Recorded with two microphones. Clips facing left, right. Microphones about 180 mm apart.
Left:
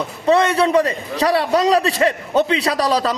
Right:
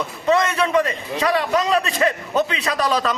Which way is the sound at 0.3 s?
30° left (ahead or behind).